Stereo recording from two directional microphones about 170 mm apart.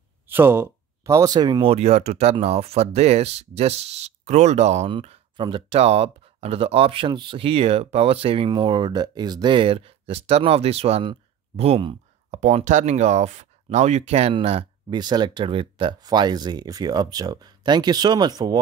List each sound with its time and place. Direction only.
0.3 s speech: 15° right (ahead or behind)